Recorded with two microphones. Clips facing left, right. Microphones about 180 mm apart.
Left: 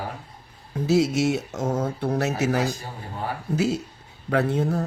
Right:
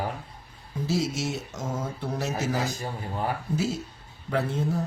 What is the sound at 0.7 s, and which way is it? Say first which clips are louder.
Speech: left 7 dB; 65° left (ahead or behind).